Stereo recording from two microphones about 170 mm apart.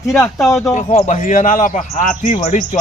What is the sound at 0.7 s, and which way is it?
A man's voice, 45° left (ahead or behind).